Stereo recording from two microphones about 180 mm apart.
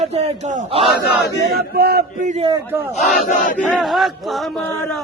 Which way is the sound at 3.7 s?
Centre (ahead or behind).